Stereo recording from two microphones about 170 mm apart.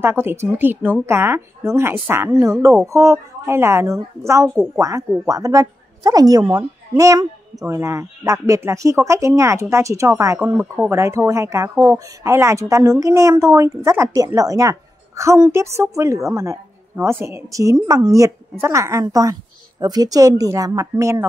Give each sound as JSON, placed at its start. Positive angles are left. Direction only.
{"t": 0.0, "sound": "a woman's voice", "side_deg": -15}